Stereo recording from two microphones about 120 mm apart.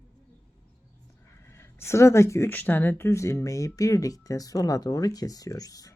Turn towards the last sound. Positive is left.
turn(degrees=30)  # may be behind; listen again after turning